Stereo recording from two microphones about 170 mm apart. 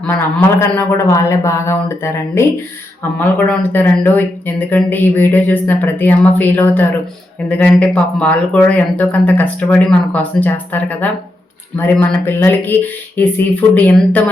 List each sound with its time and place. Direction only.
0.0 s speech: 10° left (ahead or behind)